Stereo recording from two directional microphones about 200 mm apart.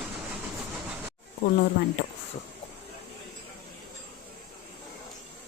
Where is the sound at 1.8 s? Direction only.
55° left (ahead or behind).